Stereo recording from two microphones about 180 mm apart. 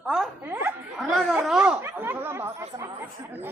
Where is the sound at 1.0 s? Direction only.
Centre (ahead or behind).